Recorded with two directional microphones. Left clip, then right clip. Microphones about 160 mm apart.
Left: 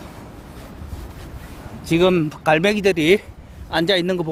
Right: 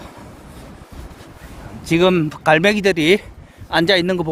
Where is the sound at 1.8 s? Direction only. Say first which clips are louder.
Right 2 dB; 30° right (ahead or behind).